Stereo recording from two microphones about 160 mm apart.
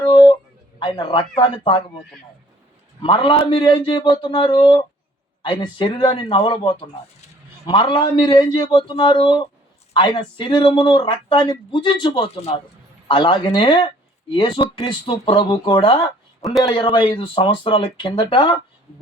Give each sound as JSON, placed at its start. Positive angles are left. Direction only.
{"t": 0.0, "sound": "a sound", "side_deg": 30}
{"t": 0.8, "sound": "a man's voice", "side_deg": 30}
{"t": 3.0, "sound": "speech", "side_deg": 30}